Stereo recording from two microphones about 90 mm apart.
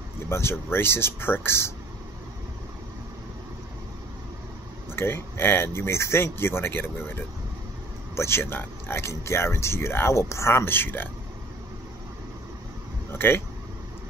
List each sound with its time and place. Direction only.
0.3 s speech: 25° left (ahead or behind)
4.9 s speech: 25° left (ahead or behind)
13.1 s speech: 25° left (ahead or behind)